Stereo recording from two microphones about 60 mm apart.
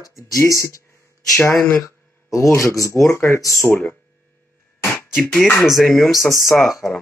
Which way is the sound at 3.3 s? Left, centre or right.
Left.